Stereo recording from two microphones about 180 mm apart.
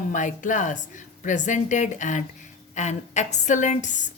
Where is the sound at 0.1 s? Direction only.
45° left (ahead or behind).